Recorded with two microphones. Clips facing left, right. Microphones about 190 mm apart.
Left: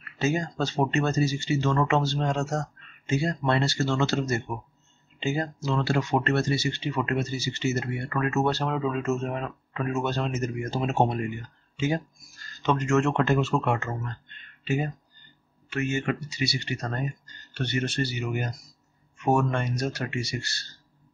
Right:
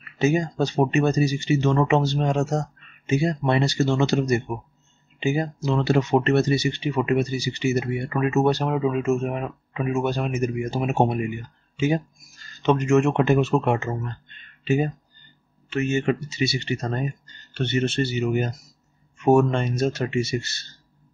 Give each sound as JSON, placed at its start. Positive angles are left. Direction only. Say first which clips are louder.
{"t": 0.0, "sound": "speech", "louder": "right 5 dB", "side_deg": -15}